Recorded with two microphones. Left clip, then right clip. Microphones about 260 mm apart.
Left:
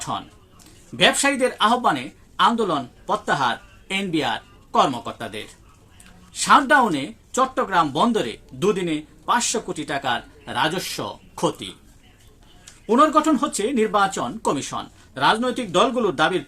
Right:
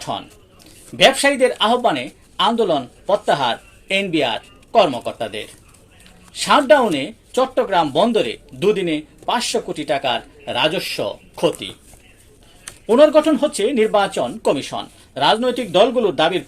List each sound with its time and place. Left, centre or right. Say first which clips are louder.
0.9 s speech: right 5 dB; centre
6.5 s speech: right 2 dB; centre
13.0 s speech: right 5 dB; centre
14.4 s speech: right 4 dB; left
14.8 s speech: right 3 dB; centre